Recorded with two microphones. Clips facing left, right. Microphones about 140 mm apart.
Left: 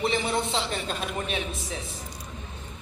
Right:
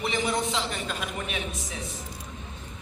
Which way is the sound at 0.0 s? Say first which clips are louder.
Left 1 dB; 30° left (ahead or behind).